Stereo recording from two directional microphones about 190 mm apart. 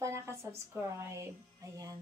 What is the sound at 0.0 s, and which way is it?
A woman's voice, 15° right (ahead or behind).